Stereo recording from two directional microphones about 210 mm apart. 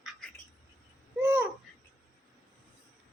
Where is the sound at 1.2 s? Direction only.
10° right (ahead or behind).